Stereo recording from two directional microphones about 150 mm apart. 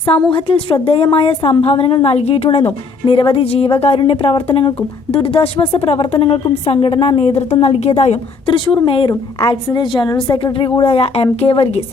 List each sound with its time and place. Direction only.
0.3 s a woman's voice: 35° left (ahead or behind)